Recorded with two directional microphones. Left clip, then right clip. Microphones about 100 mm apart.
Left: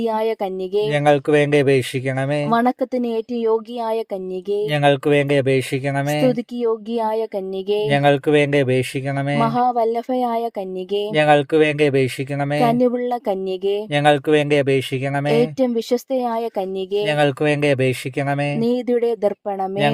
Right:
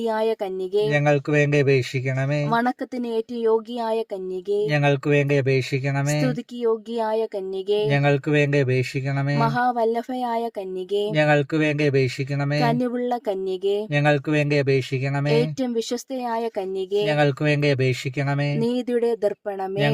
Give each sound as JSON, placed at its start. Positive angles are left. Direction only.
{"t": 0.0, "sound": "speech", "side_deg": 45}
{"t": 0.9, "sound": "speech", "side_deg": 65}
{"t": 2.5, "sound": "speech", "side_deg": 40}
{"t": 4.7, "sound": "speech", "side_deg": 60}
{"t": 6.6, "sound": "speech", "side_deg": 40}
{"t": 7.9, "sound": "speech", "side_deg": 65}
{"t": 9.4, "sound": "speech", "side_deg": 40}
{"t": 11.1, "sound": "speech", "side_deg": 60}
{"t": 12.6, "sound": "speech", "side_deg": 35}
{"t": 13.9, "sound": "speech", "side_deg": 60}
{"t": 15.3, "sound": "speech", "side_deg": 40}
{"t": 17.1, "sound": "speech", "side_deg": 60}
{"t": 18.6, "sound": "speech", "side_deg": 35}